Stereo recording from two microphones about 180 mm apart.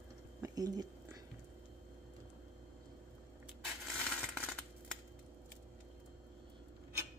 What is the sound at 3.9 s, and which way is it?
Coin, 5° left (ahead or behind).